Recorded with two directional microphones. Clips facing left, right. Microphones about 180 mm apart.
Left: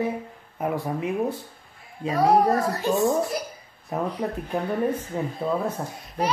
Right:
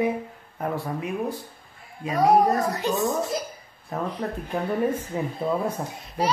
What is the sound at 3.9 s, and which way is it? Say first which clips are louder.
Speech: left 2 dB; 15° left (ahead or behind).